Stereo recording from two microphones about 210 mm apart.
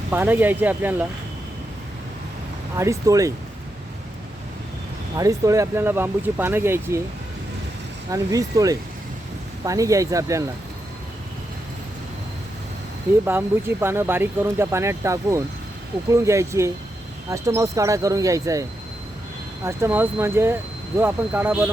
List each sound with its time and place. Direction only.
0.1 s speech: 10° right (ahead or behind)
2.7 s speech: 15° right (ahead or behind)
5.1 s speech: 15° right (ahead or behind)
8.1 s speech: 15° right (ahead or behind)
13.2 s speech: 10° right (ahead or behind)
19.6 s speech: 10° right (ahead or behind)